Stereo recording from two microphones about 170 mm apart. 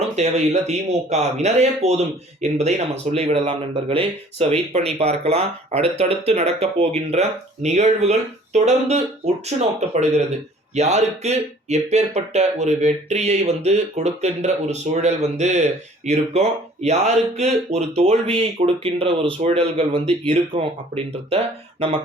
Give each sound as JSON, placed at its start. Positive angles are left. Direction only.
{"t": 0.2, "sound": "speech", "side_deg": -40}
{"t": 10.8, "sound": "speech", "side_deg": -40}